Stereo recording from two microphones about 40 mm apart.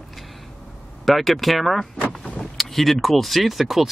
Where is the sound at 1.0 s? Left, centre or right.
Centre.